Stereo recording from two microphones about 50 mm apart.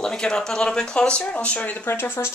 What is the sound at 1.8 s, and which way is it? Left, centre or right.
Speech, left.